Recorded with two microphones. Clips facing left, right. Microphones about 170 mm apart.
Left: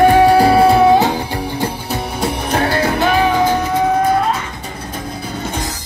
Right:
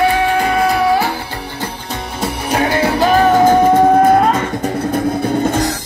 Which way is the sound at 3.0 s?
40° right (ahead or behind).